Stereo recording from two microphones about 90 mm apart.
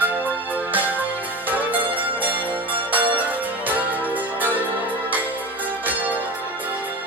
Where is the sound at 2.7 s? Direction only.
20° right (ahead or behind).